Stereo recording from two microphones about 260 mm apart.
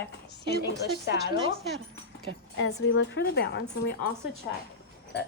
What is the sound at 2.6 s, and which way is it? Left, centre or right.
A woman's voice, left.